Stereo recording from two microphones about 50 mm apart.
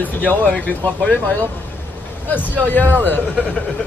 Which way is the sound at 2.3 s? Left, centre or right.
Left.